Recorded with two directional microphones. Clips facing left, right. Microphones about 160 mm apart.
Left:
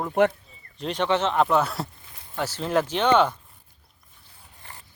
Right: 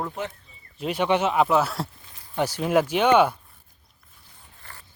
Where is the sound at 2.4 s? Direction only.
10° right (ahead or behind).